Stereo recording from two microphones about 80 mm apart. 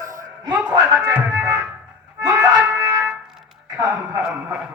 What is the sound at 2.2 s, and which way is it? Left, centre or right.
Music, right.